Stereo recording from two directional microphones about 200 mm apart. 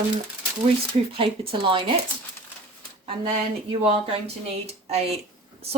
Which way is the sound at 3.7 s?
25° right (ahead or behind).